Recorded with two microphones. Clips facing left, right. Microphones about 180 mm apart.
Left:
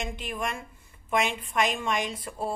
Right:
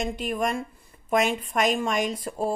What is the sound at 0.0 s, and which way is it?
A woman's voice, 40° right (ahead or behind).